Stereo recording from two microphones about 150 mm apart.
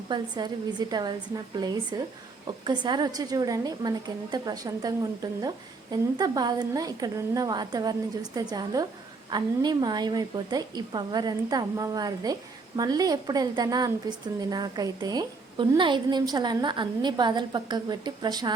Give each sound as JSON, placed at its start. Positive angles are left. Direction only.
{"t": 0.1, "sound": "a woman's voice", "side_deg": -30}